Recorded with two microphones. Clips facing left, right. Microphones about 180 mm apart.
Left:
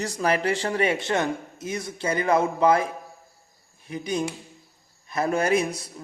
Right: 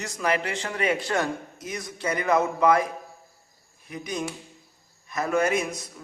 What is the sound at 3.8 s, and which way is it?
A man's voice, 30° left (ahead or behind).